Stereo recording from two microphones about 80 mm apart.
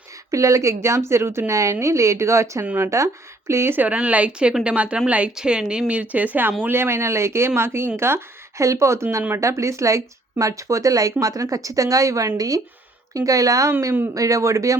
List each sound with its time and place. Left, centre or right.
0.3 s a woman's voice: right